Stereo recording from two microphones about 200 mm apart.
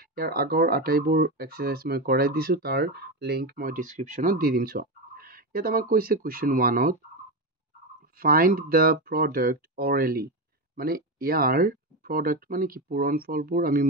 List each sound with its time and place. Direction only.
0.1 s speech: 50° right (ahead or behind)
8.2 s speech: 45° right (ahead or behind)